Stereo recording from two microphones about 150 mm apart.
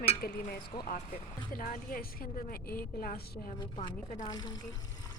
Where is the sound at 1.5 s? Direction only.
70° left (ahead or behind).